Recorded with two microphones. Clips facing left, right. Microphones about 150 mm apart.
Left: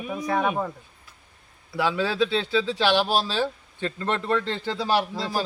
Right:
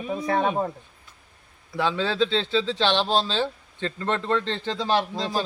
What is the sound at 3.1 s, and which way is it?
A man's voice, 25° right (ahead or behind).